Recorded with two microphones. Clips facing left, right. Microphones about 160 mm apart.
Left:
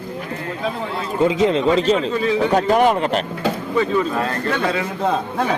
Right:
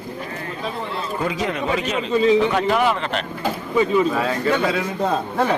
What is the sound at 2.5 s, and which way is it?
Speech, 40° left (ahead or behind).